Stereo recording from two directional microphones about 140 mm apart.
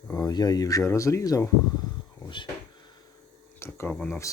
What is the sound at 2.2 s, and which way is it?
Speech, 35° left (ahead or behind).